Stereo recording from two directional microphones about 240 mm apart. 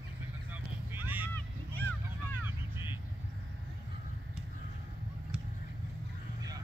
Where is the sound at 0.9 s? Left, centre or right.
Centre.